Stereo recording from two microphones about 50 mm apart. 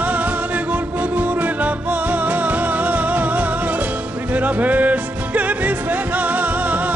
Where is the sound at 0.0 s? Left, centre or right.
Right.